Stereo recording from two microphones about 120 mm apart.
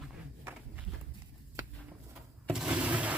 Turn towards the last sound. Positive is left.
turn(degrees=-10)  # may be behind; listen again after turning